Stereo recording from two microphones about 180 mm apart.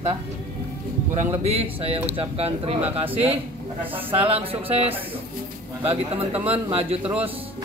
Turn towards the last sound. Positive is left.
turn(degrees=-35)  # may be behind; listen again after turning